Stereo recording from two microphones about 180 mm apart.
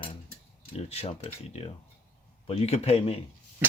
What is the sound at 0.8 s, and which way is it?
Speech, 35° left (ahead or behind).